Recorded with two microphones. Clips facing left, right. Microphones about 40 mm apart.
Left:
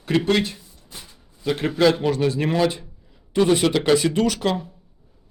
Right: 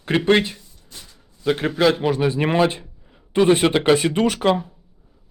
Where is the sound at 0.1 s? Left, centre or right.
Right.